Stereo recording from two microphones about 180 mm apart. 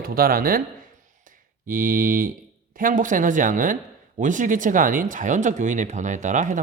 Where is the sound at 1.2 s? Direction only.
50° right (ahead or behind).